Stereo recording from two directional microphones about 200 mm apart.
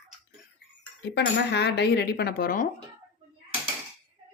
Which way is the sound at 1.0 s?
60° left (ahead or behind).